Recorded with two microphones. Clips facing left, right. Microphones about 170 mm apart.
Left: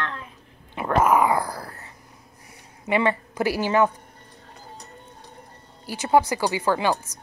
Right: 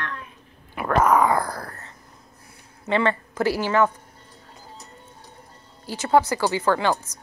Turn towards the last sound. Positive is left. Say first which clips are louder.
# right 1 dB
turn(degrees=10)  # may be behind; listen again after turning